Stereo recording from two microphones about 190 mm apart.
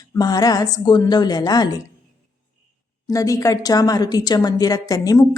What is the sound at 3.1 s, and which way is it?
Speech, 15° left (ahead or behind).